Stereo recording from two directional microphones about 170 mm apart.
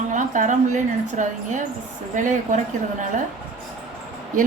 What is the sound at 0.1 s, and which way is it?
A woman's voice, 50° right (ahead or behind).